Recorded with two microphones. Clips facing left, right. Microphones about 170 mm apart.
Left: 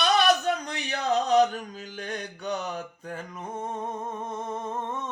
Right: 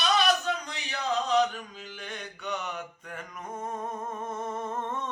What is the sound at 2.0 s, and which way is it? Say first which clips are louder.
Mantra: left 5 dB; 40° left (ahead or behind).